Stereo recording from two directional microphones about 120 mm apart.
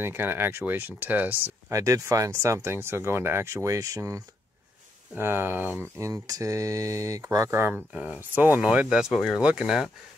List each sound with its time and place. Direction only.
0.0 s speech: 20° right (ahead or behind)
1.7 s speech: 25° right (ahead or behind)
7.7 s speech: 10° right (ahead or behind)